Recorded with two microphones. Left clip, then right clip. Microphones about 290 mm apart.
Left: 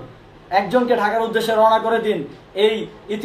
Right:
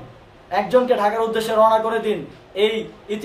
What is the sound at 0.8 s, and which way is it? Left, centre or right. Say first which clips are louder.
A man's voice: even; centre.